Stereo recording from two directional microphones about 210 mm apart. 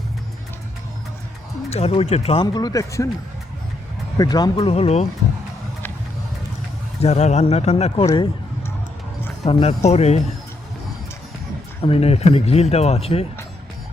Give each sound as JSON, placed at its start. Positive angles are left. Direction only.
{"t": 1.7, "sound": "speech", "side_deg": 30}
{"t": 4.2, "sound": "speech", "side_deg": 20}
{"t": 7.0, "sound": "speech", "side_deg": 30}
{"t": 9.4, "sound": "speech", "side_deg": 25}
{"t": 11.8, "sound": "speech", "side_deg": 30}